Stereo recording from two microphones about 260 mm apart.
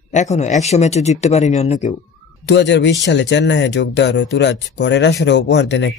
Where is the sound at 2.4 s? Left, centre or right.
Left.